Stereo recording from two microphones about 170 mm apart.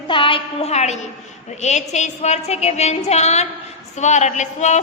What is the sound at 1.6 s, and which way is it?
A woman's voice, 45° left (ahead or behind).